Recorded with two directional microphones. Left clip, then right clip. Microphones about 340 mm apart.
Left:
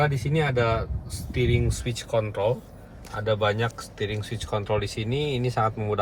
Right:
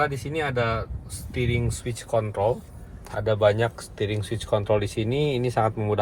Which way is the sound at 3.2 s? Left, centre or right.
Right.